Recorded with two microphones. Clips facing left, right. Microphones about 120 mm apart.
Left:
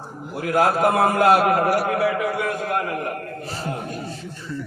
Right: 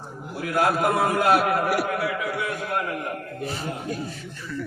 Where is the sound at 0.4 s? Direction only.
45° left (ahead or behind).